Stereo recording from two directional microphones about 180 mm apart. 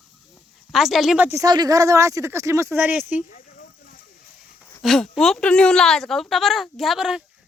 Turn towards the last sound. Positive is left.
turn(degrees=-5)  # may be behind; listen again after turning